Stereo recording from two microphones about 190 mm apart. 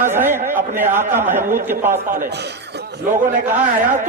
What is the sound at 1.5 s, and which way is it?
Speech, 35° right (ahead or behind).